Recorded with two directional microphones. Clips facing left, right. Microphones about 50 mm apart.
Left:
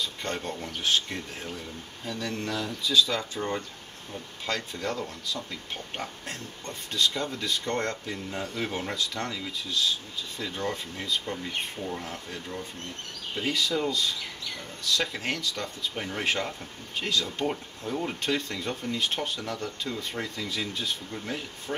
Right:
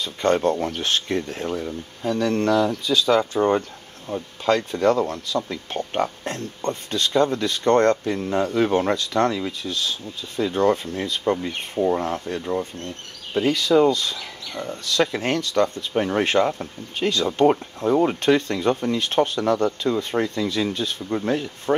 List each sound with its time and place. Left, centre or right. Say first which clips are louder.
0.0 s speech: right 12 dB; right
4.5 s speech: right 13 dB; right
17.3 s speech: right 12 dB; right